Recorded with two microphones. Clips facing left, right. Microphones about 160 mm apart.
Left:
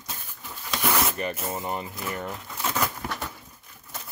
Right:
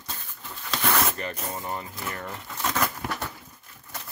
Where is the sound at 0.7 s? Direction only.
10° left (ahead or behind).